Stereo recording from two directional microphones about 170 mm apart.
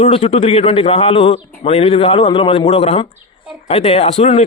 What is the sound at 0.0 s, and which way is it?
Speech, 40° left (ahead or behind).